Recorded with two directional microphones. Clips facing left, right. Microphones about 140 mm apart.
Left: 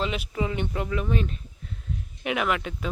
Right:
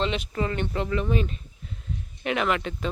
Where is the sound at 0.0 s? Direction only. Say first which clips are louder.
Right 1 dB; 5° left (ahead or behind).